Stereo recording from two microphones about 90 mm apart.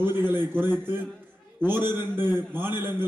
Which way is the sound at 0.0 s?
25° right (ahead or behind).